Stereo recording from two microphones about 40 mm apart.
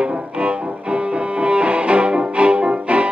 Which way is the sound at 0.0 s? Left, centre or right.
Right.